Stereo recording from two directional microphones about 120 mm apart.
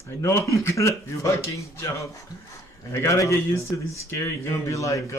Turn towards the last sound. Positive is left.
turn(degrees=25)  # may be behind; listen again after turning